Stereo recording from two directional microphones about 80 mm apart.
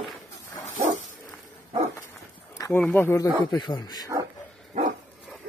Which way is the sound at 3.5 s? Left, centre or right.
Left.